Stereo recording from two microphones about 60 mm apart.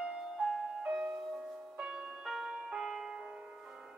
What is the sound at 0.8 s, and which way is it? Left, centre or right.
Music, centre.